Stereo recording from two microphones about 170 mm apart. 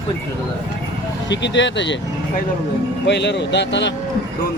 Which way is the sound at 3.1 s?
90° left.